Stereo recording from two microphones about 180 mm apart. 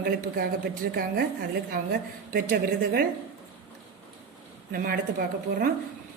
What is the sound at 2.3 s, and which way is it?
Speech, 60° right (ahead or behind).